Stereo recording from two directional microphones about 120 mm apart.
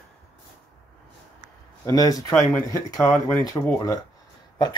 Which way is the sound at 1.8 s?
30° left (ahead or behind).